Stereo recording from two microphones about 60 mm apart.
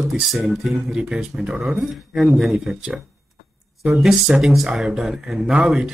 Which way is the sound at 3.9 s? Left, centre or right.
Centre.